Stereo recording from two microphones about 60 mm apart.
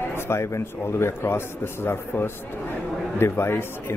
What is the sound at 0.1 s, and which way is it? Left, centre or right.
Speech, left.